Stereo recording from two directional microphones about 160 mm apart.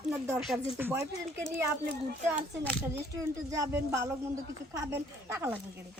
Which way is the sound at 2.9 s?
20° right (ahead or behind).